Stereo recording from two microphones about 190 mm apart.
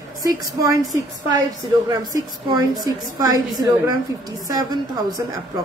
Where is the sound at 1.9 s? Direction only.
20° right (ahead or behind).